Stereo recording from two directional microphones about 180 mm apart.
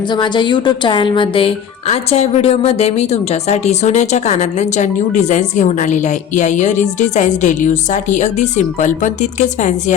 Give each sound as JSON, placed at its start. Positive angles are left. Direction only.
{"t": 0.1, "sound": "speech", "side_deg": 25}